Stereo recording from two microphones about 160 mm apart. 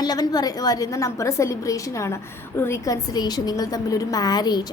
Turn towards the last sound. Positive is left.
turn(degrees=25)  # may be behind; listen again after turning